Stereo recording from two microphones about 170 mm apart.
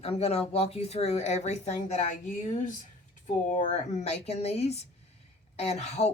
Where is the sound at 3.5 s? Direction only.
45° left (ahead or behind).